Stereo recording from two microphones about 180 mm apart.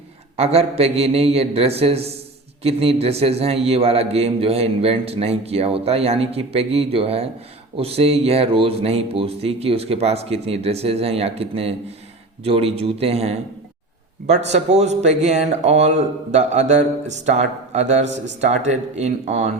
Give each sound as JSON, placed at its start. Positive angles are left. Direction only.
{"t": 0.3, "sound": "a man's voice", "side_deg": -35}